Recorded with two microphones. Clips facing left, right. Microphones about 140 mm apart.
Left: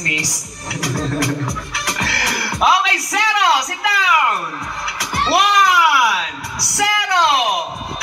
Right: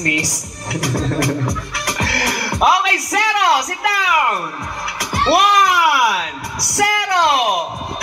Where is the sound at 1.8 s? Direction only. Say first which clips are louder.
Right 2 dB; 45° right (ahead or behind).